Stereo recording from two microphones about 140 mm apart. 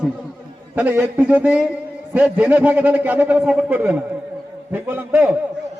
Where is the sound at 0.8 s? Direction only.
10° right (ahead or behind).